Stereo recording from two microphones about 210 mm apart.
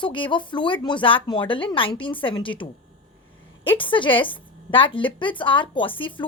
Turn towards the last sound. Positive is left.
turn(degrees=25)  # may be behind; listen again after turning